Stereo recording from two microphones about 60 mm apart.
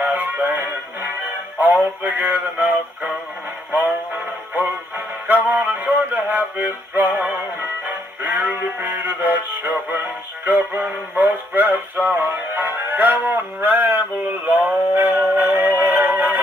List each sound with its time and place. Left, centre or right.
0.0 s music: right
4.6 s music: right